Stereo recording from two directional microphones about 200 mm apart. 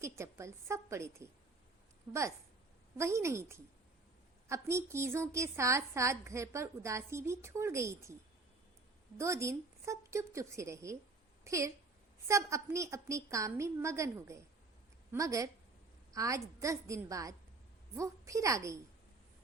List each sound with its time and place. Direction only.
0.0 s a woman's voice: 15° right (ahead or behind)
3.0 s a woman's voice: 15° right (ahead or behind)
9.1 s a woman's voice: 15° right (ahead or behind)